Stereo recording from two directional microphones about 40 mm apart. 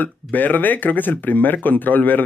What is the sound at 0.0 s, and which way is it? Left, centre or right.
Speech, left.